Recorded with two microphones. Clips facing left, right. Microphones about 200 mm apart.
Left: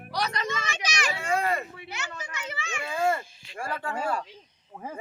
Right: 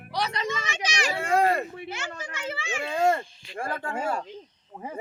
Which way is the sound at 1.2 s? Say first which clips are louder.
Right 5 dB; 60° right (ahead or behind).